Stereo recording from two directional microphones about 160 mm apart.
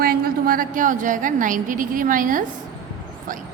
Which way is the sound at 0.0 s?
65° right (ahead or behind).